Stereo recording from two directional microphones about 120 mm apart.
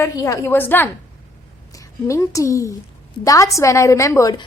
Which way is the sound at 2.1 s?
25° left (ahead or behind).